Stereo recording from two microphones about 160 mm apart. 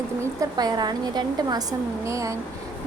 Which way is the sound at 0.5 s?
25° right (ahead or behind).